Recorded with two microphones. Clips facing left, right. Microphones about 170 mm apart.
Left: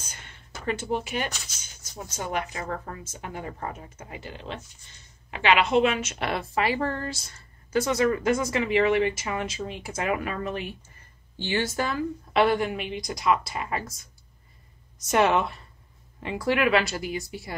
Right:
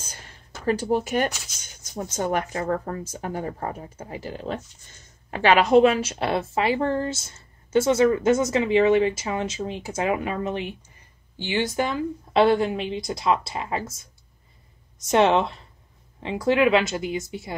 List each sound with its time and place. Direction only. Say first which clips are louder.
0.0 s a sound: right 2 dB; 35° right (ahead or behind)
0.7 s speech: right 6 dB; 40° right (ahead or behind)
15.0 s speech: right 3 dB; 25° right (ahead or behind)